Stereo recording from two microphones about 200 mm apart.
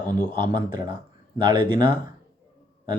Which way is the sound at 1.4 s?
25° right (ahead or behind).